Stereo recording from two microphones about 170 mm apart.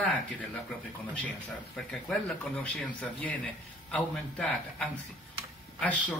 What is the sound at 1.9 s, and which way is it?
A man's voice, 5° left (ahead or behind).